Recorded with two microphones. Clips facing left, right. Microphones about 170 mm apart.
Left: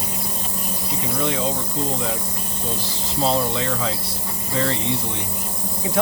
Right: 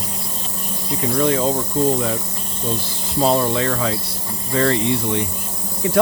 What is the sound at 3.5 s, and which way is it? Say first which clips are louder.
Speech: right 4 dB; 55° right (ahead or behind).